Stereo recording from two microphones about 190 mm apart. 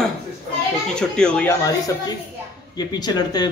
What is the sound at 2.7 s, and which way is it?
Speech, 20° left (ahead or behind).